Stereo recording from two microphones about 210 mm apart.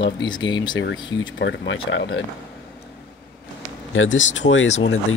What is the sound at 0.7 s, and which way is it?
Speech, 65° left (ahead or behind).